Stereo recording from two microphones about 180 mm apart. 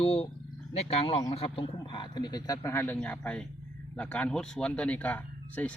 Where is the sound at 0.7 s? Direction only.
35° left (ahead or behind).